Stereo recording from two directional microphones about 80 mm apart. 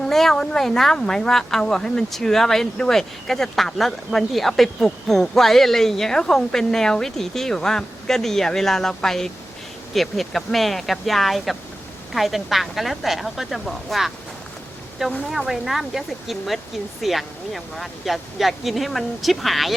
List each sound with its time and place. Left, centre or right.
0.0 s speech: centre
15.3 s speech: centre